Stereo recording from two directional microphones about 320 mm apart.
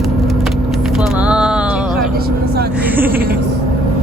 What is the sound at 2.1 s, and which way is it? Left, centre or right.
Vehicle, right.